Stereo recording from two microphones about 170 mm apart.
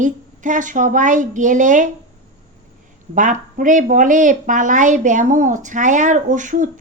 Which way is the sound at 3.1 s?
50° right (ahead or behind).